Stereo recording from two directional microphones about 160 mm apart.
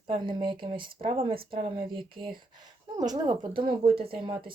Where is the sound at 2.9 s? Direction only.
25° right (ahead or behind).